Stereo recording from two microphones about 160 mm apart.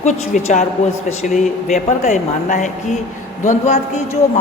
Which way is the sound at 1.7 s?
45° left (ahead or behind).